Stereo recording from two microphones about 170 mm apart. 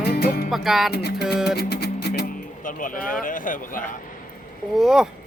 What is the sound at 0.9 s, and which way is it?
Music, 75° left (ahead or behind).